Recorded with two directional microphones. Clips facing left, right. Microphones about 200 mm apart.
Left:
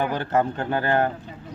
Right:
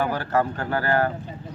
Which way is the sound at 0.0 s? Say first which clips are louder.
Left 1 dB; 20° left (ahead or behind).